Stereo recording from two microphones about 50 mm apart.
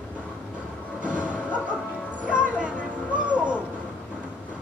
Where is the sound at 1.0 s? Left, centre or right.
Right.